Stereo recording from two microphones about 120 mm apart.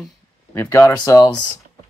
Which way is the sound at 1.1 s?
30° left (ahead or behind).